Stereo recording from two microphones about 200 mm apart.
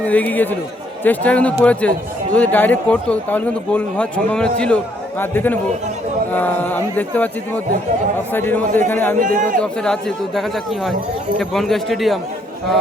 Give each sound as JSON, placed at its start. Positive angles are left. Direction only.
{"t": 0.0, "sound": "speech", "side_deg": 10}
{"t": 9.1, "sound": "a man's voice", "side_deg": -40}
{"t": 9.6, "sound": "a man's voice", "side_deg": 5}